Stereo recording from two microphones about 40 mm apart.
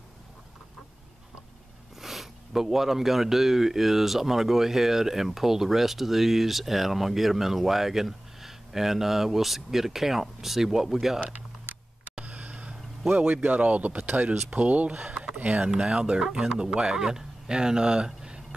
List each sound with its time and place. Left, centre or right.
2.0 s speech: centre
12.3 s a sound: right
13.0 s a man's voice: right
13.3 s speech: right
15.7 s speech: centre